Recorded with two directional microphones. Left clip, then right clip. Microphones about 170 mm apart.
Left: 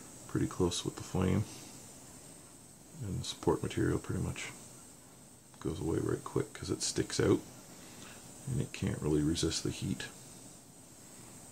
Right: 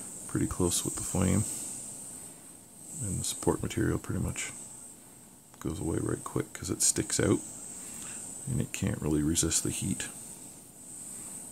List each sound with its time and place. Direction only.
0.3 s speech: 50° right (ahead or behind)
3.2 s speech: 50° right (ahead or behind)
5.6 s speech: 50° right (ahead or behind)
8.5 s speech: 50° right (ahead or behind)